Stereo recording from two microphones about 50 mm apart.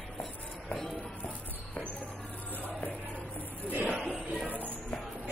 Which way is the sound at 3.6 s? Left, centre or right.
Right.